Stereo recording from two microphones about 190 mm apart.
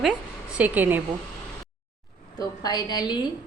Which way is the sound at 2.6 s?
20° left (ahead or behind).